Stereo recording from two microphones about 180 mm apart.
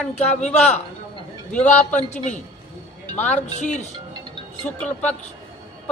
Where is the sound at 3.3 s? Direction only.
40° left (ahead or behind).